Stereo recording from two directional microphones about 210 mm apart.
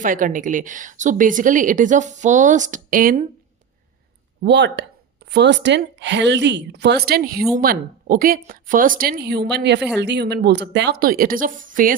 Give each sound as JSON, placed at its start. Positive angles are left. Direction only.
{"t": 0.0, "sound": "a woman's voice", "side_deg": -40}
{"t": 4.4, "sound": "a woman's voice", "side_deg": -55}
{"t": 11.0, "sound": "a woman's voice", "side_deg": -45}